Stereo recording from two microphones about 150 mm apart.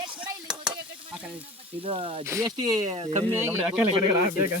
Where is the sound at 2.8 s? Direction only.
45° right (ahead or behind).